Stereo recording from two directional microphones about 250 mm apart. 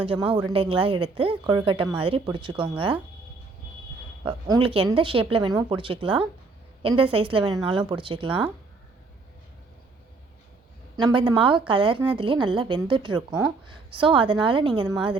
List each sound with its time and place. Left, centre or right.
0.0 s speech: right
4.2 s speech: centre
10.9 s speech: centre